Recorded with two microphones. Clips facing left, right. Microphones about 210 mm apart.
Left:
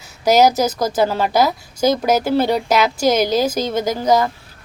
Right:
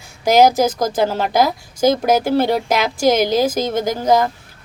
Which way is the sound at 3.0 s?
50° right (ahead or behind).